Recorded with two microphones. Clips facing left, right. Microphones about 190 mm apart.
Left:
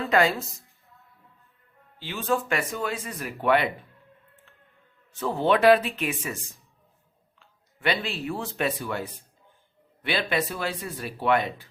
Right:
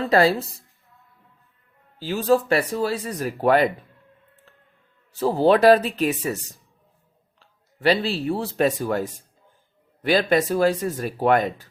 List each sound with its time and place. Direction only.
0.0 s speech: 35° right (ahead or behind)
2.0 s speech: 40° right (ahead or behind)
5.1 s speech: 35° right (ahead or behind)
7.3 s speech: 35° right (ahead or behind)